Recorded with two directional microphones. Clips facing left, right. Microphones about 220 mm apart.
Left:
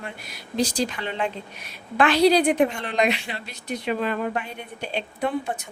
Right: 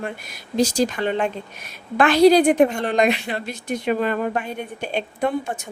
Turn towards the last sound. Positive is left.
turn(degrees=-50)  # may be behind; listen again after turning